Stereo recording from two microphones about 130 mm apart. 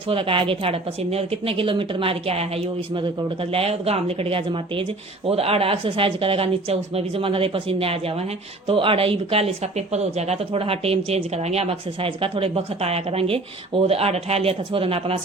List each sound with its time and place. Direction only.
0.1 s speech: 40° right (ahead or behind)
2.9 s speech: 40° right (ahead or behind)